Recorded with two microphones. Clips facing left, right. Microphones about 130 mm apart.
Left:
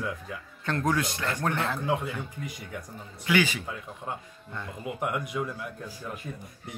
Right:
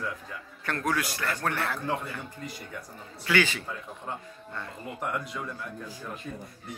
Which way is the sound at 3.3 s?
15° left (ahead or behind).